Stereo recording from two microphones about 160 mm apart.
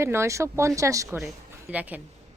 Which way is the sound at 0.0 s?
15° right (ahead or behind).